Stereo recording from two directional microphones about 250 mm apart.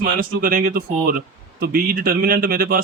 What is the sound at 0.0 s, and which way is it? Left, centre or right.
A man's voice, right.